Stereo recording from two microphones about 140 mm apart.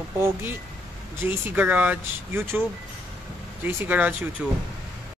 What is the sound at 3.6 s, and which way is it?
Speech, 15° right (ahead or behind).